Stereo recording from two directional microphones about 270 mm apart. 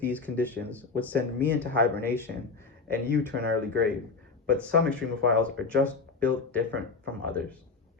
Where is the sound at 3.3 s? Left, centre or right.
Right.